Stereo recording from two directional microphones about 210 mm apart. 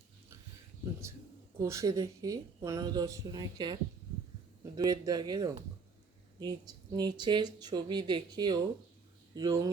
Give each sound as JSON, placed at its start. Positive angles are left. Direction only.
{"t": 1.5, "sound": "a woman's voice", "side_deg": -15}